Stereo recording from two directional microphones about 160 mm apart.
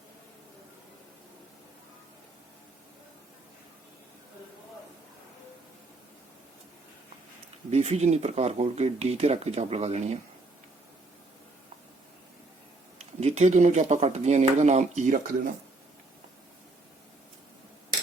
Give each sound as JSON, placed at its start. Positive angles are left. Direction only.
{"t": 7.7, "sound": "speech", "side_deg": -45}
{"t": 13.0, "sound": "speech", "side_deg": -45}